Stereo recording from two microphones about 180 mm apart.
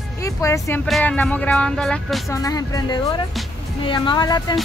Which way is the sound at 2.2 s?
20° left (ahead or behind).